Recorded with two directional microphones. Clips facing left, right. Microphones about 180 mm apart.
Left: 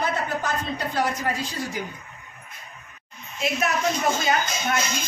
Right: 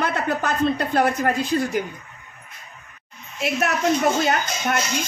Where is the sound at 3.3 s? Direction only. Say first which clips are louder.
Right 2 dB; 65° right (ahead or behind).